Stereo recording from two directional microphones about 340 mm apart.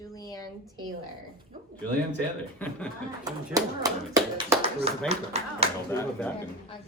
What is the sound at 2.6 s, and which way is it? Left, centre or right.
Speech, centre.